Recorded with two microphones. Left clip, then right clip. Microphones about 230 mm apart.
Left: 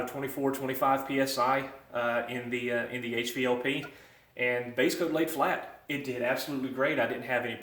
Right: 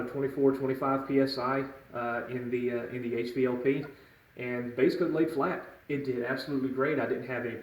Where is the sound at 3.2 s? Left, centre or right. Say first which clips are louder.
Even; centre.